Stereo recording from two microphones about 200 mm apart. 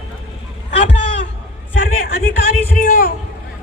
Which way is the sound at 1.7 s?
75° left (ahead or behind).